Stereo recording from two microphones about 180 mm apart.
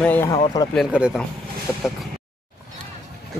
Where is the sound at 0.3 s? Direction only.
25° left (ahead or behind).